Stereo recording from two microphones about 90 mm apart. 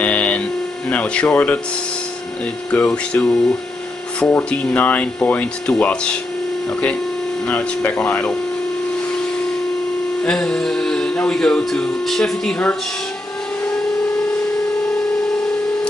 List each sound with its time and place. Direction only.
0.0 s music: 15° left (ahead or behind)
2.7 s speech: 15° left (ahead or behind)
10.2 s speech: 10° left (ahead or behind)